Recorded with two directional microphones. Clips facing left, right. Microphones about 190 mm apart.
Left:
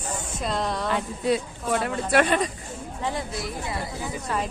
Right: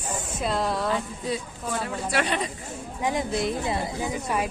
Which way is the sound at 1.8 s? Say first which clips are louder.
Left 5 dB; 50° left (ahead or behind).